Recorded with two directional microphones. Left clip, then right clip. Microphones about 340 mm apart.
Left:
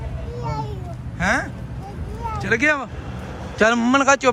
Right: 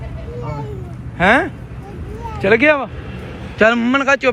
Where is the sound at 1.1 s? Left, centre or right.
Centre.